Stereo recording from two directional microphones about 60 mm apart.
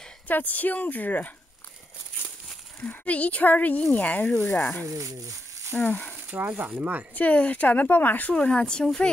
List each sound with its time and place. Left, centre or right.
0.3 s speech: left
2.8 s speech: left
4.3 s speech: centre
4.6 s speech: left
4.8 s speech: right
5.8 s speech: left
6.3 s speech: right
7.2 s speech: left